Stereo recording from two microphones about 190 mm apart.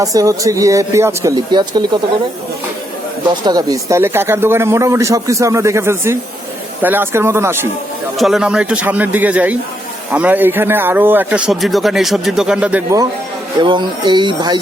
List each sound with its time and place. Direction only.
0.0 s speech: 15° right (ahead or behind)
3.2 s speech: 20° right (ahead or behind)
13.6 s speech: 25° right (ahead or behind)